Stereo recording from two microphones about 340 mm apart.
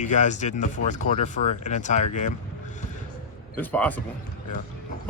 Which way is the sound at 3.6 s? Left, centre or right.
Centre.